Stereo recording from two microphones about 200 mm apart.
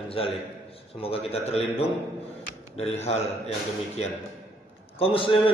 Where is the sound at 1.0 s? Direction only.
30° left (ahead or behind).